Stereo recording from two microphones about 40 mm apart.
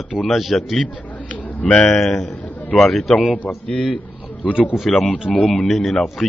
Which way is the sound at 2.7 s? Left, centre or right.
Left.